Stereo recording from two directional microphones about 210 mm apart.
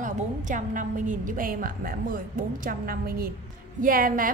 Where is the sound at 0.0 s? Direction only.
35° right (ahead or behind).